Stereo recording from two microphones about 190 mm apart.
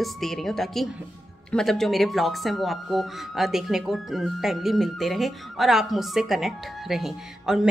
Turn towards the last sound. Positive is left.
turn(degrees=0)  # may be behind; listen again after turning